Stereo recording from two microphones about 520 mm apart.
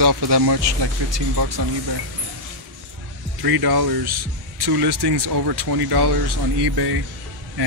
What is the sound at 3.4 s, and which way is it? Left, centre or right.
Speech, right.